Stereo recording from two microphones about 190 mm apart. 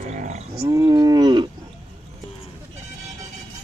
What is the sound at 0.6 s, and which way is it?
Cattle, 15° right (ahead or behind).